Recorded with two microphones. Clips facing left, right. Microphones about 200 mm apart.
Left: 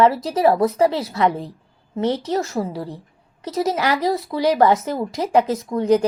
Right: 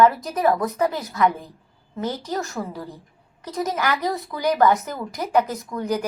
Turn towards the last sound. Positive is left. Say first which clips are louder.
# left 8 dB
turn(degrees=30)  # may be behind; listen again after turning